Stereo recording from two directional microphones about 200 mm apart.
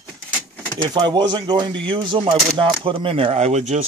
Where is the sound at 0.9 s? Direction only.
20° right (ahead or behind).